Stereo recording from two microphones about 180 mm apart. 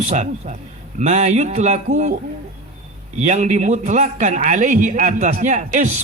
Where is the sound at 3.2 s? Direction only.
40° right (ahead or behind).